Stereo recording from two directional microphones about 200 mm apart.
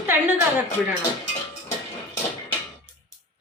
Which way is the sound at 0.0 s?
10° right (ahead or behind).